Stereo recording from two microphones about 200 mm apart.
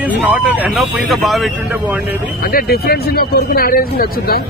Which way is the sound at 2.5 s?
50° left (ahead or behind).